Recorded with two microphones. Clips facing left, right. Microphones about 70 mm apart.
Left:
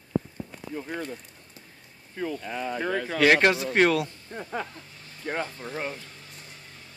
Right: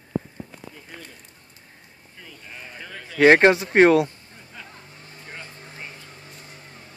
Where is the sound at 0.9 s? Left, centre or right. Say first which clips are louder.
Left 9 dB; left.